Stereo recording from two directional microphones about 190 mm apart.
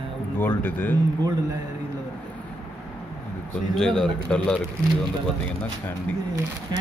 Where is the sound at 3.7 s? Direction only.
5° left (ahead or behind).